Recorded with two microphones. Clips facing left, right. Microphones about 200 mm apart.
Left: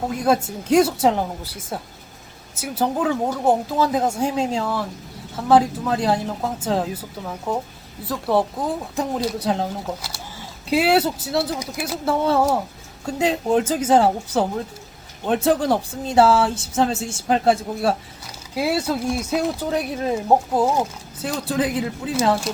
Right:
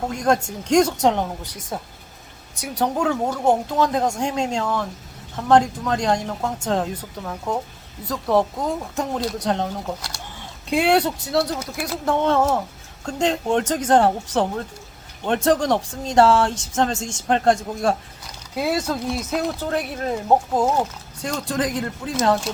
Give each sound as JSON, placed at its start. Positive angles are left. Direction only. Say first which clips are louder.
{"t": 0.1, "sound": "speech", "louder": "left 1 dB", "side_deg": 5}